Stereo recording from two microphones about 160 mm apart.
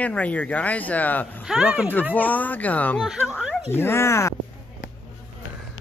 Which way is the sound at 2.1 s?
10° left (ahead or behind).